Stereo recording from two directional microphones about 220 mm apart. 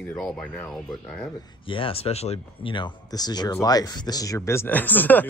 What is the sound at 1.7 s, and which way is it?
Speech, 25° left (ahead or behind).